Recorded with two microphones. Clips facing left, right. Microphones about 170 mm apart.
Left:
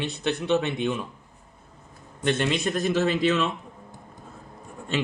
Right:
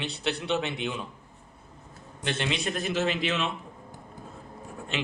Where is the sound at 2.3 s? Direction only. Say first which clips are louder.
Left 6 dB; 50° left (ahead or behind).